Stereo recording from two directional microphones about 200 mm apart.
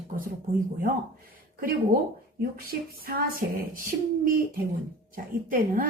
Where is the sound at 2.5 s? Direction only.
50° right (ahead or behind).